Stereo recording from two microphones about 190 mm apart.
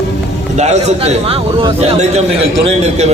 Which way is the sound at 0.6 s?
35° right (ahead or behind).